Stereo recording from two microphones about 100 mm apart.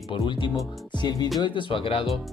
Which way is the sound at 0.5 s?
45° left (ahead or behind).